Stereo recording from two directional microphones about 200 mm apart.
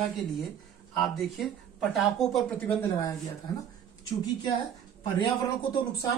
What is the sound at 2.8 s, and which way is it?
Speech, 15° left (ahead or behind).